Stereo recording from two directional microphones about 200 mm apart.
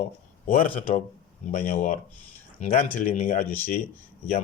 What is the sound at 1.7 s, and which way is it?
Speech, 35° left (ahead or behind).